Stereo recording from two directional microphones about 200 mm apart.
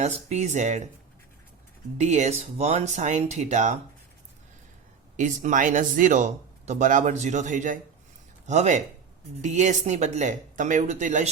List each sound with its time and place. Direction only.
0.0 s speech: 35° right (ahead or behind)
2.0 s speech: 35° right (ahead or behind)
5.1 s speech: 40° right (ahead or behind)